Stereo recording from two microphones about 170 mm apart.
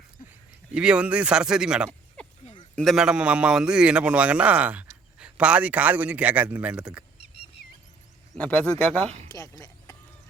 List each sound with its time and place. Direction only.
0.3 s speech: 5° right (ahead or behind)
2.4 s a sound: 35° left (ahead or behind)
2.7 s a man's voice: centre (ahead or behind)
8.4 s a man's voice: 10° left (ahead or behind)
9.0 s speech: 40° right (ahead or behind)
9.3 s speech: 20° left (ahead or behind)